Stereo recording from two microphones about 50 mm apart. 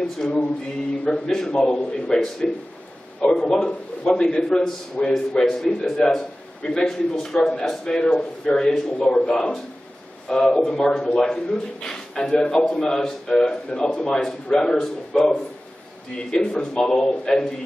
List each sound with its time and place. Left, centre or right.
0.2 s a man's voice: centre